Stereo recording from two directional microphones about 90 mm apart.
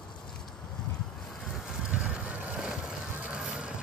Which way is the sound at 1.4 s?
5° right (ahead or behind).